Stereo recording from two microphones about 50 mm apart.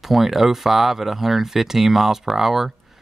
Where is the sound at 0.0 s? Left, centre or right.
Centre.